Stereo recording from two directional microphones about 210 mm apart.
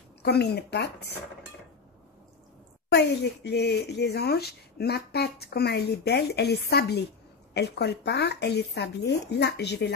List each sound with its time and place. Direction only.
0.2 s speech: 50° left (ahead or behind)
2.9 s speech: 50° left (ahead or behind)